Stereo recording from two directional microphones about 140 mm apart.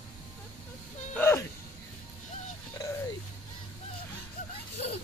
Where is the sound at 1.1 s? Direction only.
15° left (ahead or behind).